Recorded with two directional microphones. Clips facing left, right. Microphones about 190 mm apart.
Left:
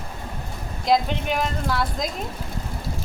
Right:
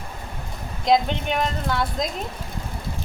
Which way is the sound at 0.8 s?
Centre (ahead or behind).